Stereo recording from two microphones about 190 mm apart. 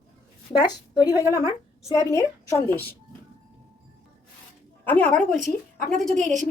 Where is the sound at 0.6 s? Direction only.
20° left (ahead or behind).